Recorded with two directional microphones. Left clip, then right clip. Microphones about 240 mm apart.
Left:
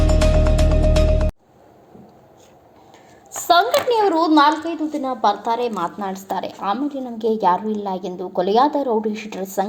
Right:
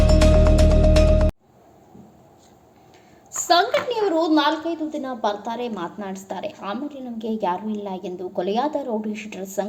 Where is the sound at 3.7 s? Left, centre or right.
Centre.